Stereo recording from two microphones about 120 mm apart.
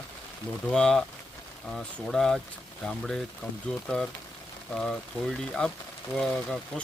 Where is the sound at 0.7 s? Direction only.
5° left (ahead or behind).